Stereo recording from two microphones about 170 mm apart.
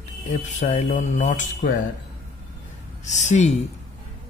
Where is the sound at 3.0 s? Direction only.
45° left (ahead or behind).